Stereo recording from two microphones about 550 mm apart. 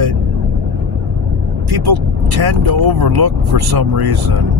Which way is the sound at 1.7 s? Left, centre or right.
Right.